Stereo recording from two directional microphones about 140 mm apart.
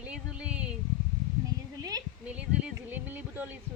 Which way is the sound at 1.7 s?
25° right (ahead or behind).